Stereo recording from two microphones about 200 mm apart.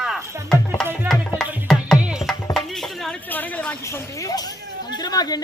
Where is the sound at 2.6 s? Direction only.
Centre (ahead or behind).